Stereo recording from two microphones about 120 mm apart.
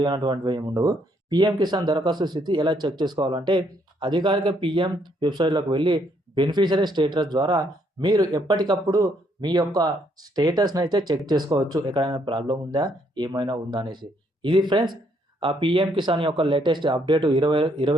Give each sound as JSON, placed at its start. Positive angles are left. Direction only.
{"t": 0.0, "sound": "speech", "side_deg": -40}